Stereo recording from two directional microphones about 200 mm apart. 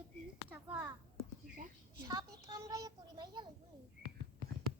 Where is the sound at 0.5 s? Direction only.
10° right (ahead or behind).